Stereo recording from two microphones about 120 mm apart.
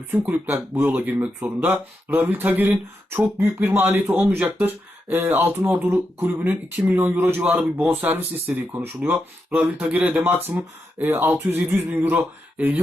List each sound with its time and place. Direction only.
0.1 s speech: 15° right (ahead or behind)
7.6 s speech: 5° right (ahead or behind)
8.0 s speech: 15° right (ahead or behind)